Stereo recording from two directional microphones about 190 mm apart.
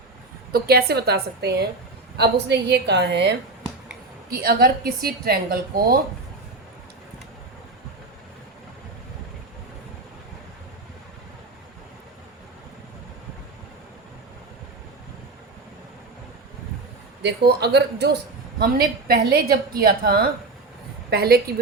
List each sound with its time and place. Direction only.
0.5 s a woman's voice: 55° right (ahead or behind)
4.3 s a woman's voice: 55° right (ahead or behind)
17.2 s a woman's voice: 60° right (ahead or behind)
18.6 s a woman's voice: 50° right (ahead or behind)